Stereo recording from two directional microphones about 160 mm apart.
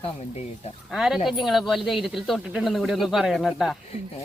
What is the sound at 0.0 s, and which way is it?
Speech, 40° left (ahead or behind).